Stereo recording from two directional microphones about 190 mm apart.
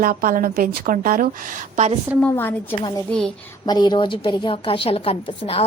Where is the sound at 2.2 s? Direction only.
10° left (ahead or behind).